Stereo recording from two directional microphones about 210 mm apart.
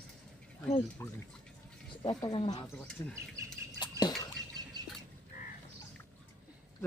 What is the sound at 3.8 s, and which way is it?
Drip, 20° left (ahead or behind).